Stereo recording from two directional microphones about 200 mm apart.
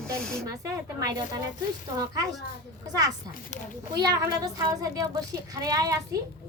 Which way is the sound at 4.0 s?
20° right (ahead or behind).